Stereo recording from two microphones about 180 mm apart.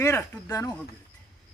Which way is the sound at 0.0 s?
15° left (ahead or behind).